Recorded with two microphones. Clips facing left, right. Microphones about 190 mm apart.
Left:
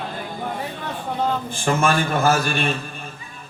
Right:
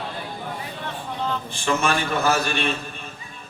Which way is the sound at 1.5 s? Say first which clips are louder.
Left 2 dB; 45° left (ahead or behind).